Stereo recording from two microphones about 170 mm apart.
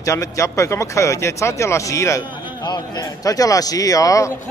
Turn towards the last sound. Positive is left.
turn(degrees=20)  # may be behind; listen again after turning